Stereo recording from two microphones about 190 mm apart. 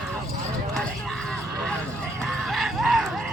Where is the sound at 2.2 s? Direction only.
Centre (ahead or behind).